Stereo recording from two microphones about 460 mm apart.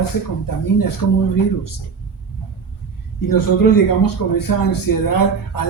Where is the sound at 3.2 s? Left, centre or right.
Left.